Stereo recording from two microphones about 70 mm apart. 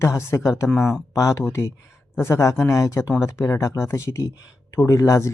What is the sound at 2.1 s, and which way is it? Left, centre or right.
Speech, left.